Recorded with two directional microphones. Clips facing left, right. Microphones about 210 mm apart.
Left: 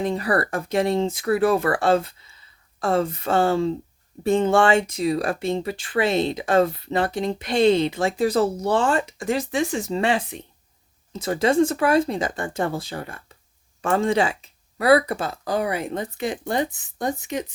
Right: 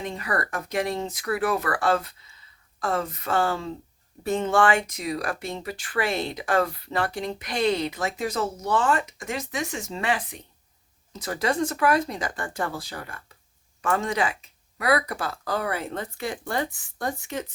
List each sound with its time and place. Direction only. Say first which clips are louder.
0.0 s speech: left 7 dB; 35° left (ahead or behind); by 17.4 s 20° left (ahead or behind)